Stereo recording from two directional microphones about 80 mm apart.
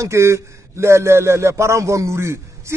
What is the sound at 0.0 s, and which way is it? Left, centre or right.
A man's voice, right.